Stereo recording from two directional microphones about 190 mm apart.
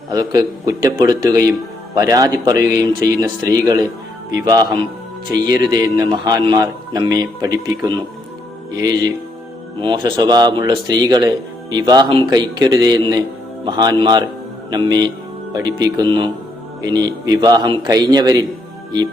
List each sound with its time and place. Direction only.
0.1 s speech: 20° right (ahead or behind)